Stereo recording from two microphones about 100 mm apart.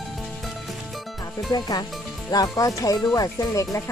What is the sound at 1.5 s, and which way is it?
Speech, 45° left (ahead or behind).